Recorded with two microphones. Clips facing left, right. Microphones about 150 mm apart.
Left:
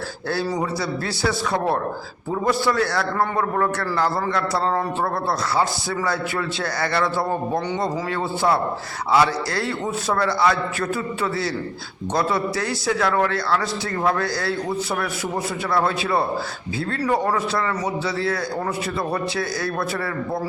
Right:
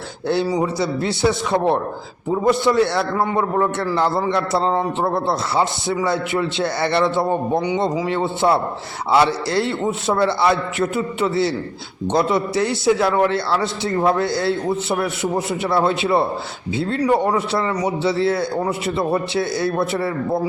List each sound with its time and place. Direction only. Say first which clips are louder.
0.4 s a man's voice: right 4 dB; 15° right (ahead or behind)